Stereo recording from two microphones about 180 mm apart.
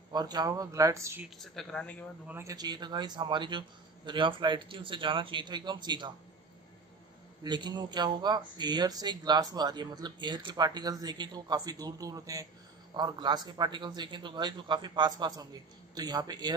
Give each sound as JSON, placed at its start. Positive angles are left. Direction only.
{"t": 0.1, "sound": "speech", "side_deg": -20}
{"t": 1.4, "sound": "speech", "side_deg": 0}
{"t": 2.2, "sound": "speech", "side_deg": -15}
{"t": 7.4, "sound": "speech", "side_deg": -25}